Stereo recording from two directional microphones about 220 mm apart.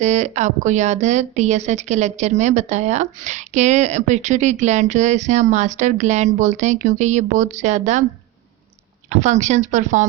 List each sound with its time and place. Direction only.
0.0 s speech: 30° right (ahead or behind)
9.0 s speech: 30° right (ahead or behind)